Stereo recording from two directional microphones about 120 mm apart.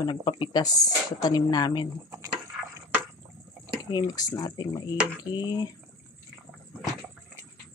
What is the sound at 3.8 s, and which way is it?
Speech, 35° left (ahead or behind).